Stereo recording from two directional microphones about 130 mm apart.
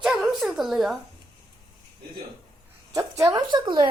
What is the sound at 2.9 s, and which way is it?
Speech, 25° right (ahead or behind).